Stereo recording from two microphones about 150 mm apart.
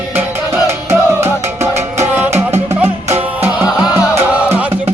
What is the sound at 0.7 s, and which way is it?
Music, 15° right (ahead or behind).